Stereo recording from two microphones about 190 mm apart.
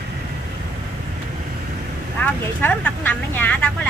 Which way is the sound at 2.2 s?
10° left (ahead or behind).